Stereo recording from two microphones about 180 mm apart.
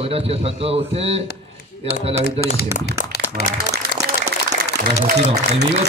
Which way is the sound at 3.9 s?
65° left (ahead or behind).